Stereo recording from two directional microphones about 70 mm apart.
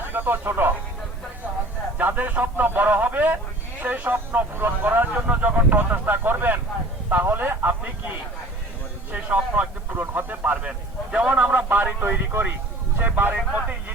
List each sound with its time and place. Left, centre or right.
0.1 s speech: right
2.0 s a man's voice: right
9.1 s a man's voice: right